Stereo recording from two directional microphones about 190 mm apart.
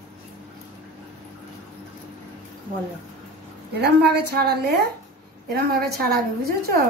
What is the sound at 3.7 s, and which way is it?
A woman's voice, 60° right (ahead or behind).